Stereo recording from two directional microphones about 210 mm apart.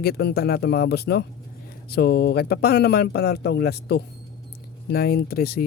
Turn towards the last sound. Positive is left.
turn(degrees=45)  # may be behind; listen again after turning